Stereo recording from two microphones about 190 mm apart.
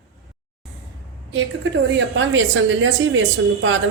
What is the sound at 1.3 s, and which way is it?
A woman's voice, 75° right (ahead or behind).